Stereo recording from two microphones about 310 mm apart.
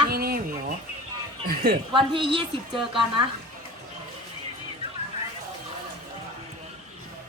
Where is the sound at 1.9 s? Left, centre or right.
Centre.